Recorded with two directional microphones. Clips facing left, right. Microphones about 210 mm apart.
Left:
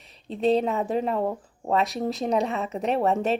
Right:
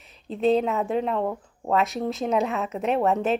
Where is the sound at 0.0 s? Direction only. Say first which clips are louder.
Right 1 dB; 35° left (ahead or behind).